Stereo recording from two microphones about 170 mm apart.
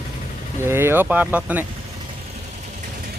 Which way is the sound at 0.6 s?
15° right (ahead or behind).